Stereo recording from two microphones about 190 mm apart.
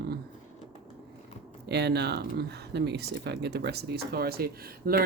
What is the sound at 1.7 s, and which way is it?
Speech, 60° right (ahead or behind).